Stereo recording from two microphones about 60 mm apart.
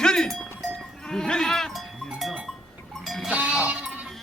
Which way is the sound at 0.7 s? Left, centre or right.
Centre.